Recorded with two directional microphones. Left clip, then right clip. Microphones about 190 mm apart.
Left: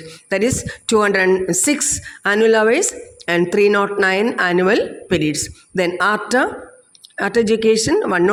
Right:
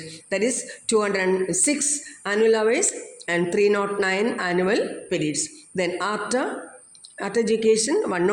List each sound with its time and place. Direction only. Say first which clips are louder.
0.1 s speech: left 6 dB; 40° left (ahead or behind)